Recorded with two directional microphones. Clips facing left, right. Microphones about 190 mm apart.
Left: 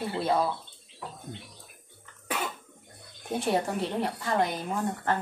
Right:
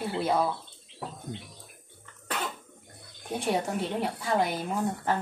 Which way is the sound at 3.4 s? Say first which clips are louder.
Left 1 dB; centre (ahead or behind).